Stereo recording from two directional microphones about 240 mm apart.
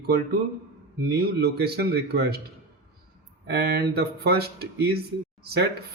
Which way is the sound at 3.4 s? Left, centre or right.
Right.